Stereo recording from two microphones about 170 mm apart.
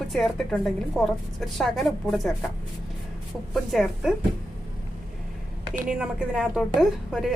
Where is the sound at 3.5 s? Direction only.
Centre (ahead or behind).